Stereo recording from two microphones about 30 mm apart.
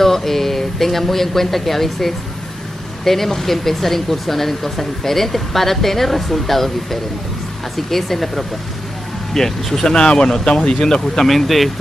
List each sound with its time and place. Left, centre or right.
0.0 s speech: centre
9.8 s speech: left
11.2 s speech: centre